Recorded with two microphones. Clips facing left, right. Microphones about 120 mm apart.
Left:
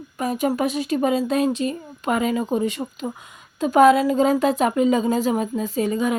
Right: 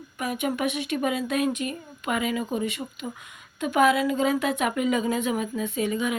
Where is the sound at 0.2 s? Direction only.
35° left (ahead or behind).